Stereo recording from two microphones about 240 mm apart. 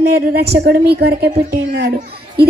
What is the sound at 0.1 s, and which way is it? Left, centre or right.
A woman's voice, right.